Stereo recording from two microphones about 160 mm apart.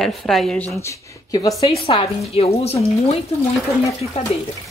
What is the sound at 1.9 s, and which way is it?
Speech, 40° left (ahead or behind).